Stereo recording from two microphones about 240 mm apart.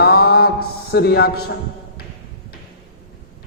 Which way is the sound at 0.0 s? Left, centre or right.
Left.